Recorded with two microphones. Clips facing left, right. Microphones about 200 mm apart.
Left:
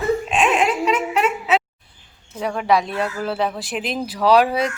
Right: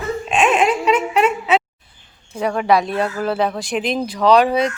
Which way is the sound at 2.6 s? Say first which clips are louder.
Right 2 dB; centre (ahead or behind).